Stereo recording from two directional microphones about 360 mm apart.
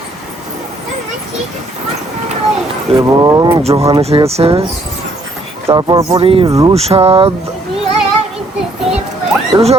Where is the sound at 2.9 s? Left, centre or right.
Centre.